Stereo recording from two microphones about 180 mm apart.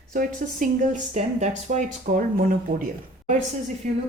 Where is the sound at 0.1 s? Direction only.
50° right (ahead or behind).